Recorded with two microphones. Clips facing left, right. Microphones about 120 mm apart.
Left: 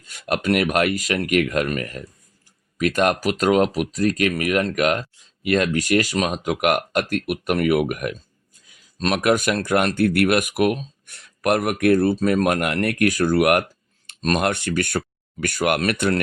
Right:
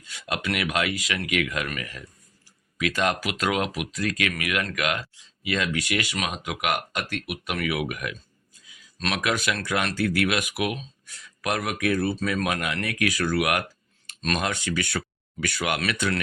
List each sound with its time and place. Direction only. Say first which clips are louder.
0.1 s speech: left 8 dB; 50° left (ahead or behind)
3.2 s speech: left 8 dB; 40° left (ahead or behind)
14.4 s speech: left 6 dB; 60° left (ahead or behind)